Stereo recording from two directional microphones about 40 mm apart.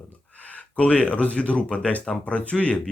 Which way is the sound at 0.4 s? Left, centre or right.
Left.